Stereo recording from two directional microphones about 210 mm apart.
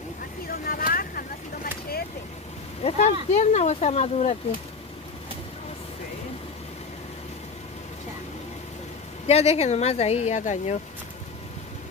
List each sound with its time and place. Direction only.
0.7 s vehicle: 45° left (ahead or behind)
2.8 s speech: 35° left (ahead or behind)
9.3 s speech: 30° left (ahead or behind)